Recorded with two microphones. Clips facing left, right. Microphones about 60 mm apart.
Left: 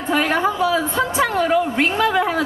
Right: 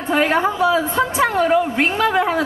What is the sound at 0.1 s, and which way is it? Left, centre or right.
A woman's voice, right.